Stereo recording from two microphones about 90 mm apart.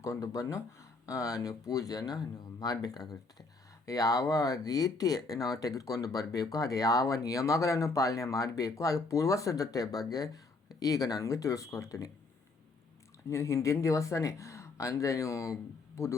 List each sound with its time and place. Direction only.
0.0 s speech: 35° left (ahead or behind)
13.3 s speech: 35° left (ahead or behind)